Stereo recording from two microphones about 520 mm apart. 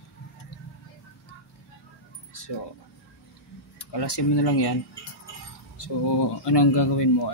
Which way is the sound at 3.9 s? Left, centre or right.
Left.